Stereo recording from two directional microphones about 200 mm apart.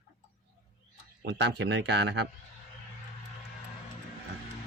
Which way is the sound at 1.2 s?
55° right (ahead or behind).